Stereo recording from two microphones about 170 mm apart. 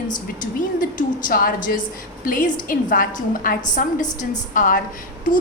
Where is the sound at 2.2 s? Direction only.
55° left (ahead or behind).